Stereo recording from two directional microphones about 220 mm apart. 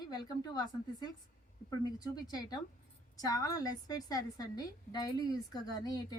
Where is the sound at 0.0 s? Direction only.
20° left (ahead or behind).